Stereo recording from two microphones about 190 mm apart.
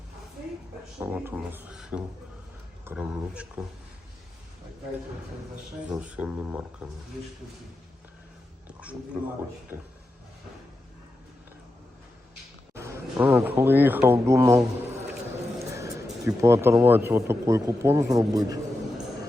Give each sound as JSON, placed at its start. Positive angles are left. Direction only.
{"t": 0.9, "sound": "speech", "side_deg": -10}
{"t": 5.9, "sound": "speech", "side_deg": -5}
{"t": 8.6, "sound": "a sound", "side_deg": -5}
{"t": 9.7, "sound": "speech", "side_deg": -10}
{"t": 12.7, "sound": "speech", "side_deg": -15}
{"t": 15.5, "sound": "a sound", "side_deg": -15}
{"t": 16.2, "sound": "a man's voice", "side_deg": -15}